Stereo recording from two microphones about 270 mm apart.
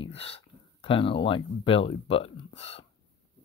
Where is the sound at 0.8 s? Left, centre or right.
Centre.